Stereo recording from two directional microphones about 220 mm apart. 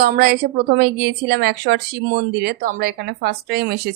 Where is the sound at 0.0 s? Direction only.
45° right (ahead or behind).